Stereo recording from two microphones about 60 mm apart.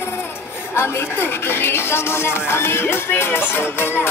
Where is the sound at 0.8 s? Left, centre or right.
Left.